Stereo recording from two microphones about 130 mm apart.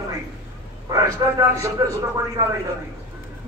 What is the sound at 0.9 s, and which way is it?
A man's voice, 25° right (ahead or behind).